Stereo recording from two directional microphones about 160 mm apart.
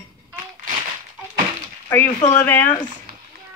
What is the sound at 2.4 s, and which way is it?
Speech, 10° left (ahead or behind).